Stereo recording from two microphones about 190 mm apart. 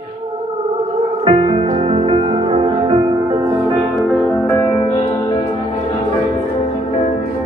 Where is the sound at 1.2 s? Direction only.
30° right (ahead or behind).